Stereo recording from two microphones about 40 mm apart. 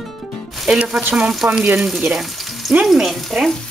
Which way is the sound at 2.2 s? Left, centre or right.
Centre.